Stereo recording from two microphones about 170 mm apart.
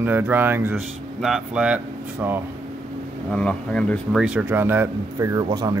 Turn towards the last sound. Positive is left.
turn(degrees=-20)  # may be behind; listen again after turning